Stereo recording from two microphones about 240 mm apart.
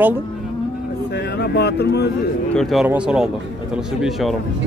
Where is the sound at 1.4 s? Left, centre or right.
Left.